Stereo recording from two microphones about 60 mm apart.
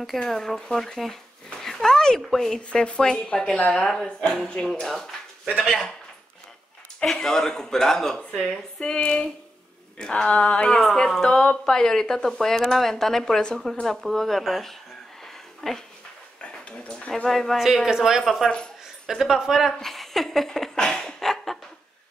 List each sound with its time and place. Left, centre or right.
0.0 s speech: centre
1.5 s a sound: centre
2.2 s speech: centre
2.7 s speech: centre
5.6 s speech: centre
7.0 s speech: centre
10.8 s speech: centre
16.3 s a sound: centre
17.1 s speech: centre
19.8 s a sound: centre